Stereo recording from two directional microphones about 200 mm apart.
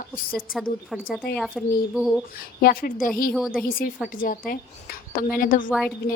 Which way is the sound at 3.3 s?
5° right (ahead or behind).